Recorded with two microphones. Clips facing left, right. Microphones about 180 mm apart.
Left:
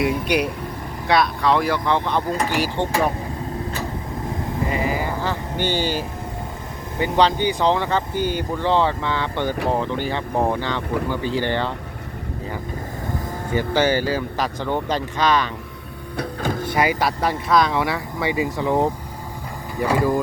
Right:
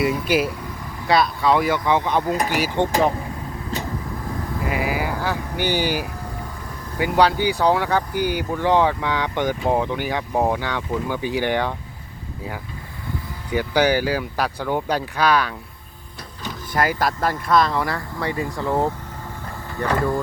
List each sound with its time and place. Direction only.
0.0 s speech: 5° right (ahead or behind); by 2.9 s 20° right (ahead or behind)
4.7 s speech: 5° right (ahead or behind)
13.7 s speech: 10° right (ahead or behind)
16.1 s a sound: 50° left (ahead or behind)
17.0 s speech: 5° left (ahead or behind)